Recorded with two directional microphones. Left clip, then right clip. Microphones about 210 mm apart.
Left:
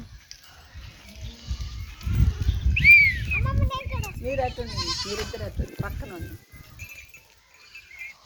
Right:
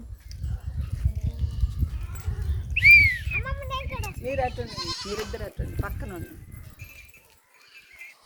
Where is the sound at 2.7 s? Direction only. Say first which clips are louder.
Even; 5° left (ahead or behind).